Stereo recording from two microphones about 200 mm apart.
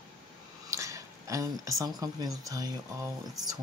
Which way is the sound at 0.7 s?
15° right (ahead or behind).